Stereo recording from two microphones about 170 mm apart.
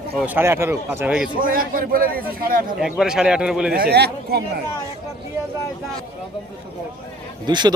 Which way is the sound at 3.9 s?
75° right (ahead or behind).